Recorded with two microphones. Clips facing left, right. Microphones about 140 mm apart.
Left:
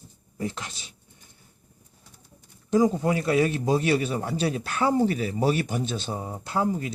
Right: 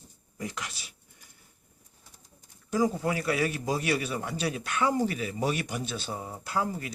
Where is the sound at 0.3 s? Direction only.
30° left (ahead or behind).